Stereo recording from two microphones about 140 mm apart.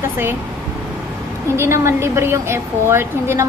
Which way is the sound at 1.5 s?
20° right (ahead or behind).